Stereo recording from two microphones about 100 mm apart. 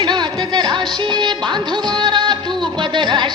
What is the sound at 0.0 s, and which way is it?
Music, 45° right (ahead or behind).